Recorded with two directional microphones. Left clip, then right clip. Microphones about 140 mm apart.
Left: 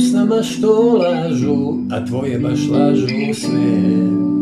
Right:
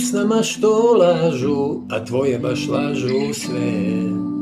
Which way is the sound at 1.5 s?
5° right (ahead or behind).